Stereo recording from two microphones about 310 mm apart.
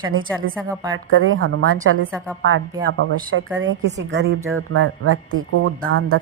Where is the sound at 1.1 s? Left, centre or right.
Right.